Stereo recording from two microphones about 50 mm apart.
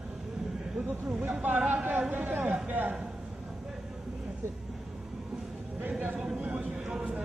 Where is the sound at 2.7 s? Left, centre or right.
Right.